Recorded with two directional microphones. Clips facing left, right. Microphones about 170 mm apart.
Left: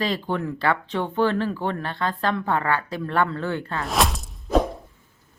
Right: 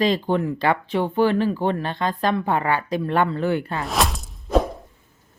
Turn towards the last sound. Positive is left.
turn(degrees=0)  # may be behind; listen again after turning